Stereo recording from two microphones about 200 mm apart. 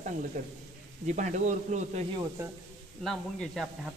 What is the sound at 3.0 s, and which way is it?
Speech, centre (ahead or behind).